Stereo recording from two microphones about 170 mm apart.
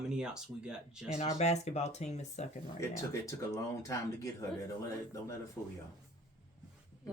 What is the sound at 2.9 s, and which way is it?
Speech, 20° left (ahead or behind).